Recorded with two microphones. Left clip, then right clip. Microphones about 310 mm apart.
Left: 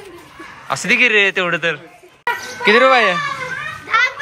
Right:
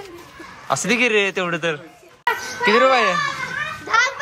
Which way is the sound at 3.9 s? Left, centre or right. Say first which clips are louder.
Left 2 dB; right.